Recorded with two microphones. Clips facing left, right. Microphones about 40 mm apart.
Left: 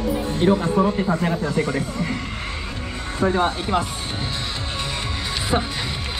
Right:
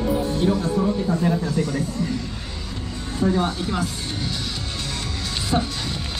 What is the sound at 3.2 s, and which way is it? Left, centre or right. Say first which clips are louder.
Speech: left 2 dB; left.